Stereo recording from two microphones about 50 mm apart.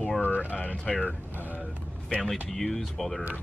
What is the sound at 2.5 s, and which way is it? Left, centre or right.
Speech, centre.